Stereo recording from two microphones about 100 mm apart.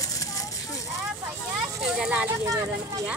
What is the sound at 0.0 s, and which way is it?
Clip-clop, 35° left (ahead or behind).